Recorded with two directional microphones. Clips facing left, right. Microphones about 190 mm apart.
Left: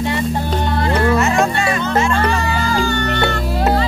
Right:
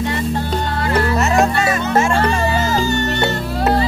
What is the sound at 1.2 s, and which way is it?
Music, 40° right (ahead or behind).